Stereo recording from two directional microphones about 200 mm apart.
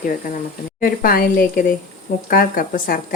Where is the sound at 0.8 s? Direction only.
45° left (ahead or behind).